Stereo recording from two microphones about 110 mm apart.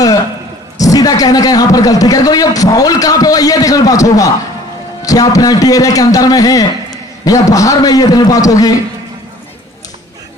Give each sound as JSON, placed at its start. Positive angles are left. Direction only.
{"t": 0.7, "sound": "a man's voice", "side_deg": 35}